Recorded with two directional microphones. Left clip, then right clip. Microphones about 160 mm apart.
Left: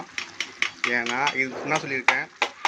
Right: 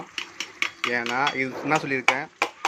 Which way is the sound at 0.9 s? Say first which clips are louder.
Even; 10° right (ahead or behind).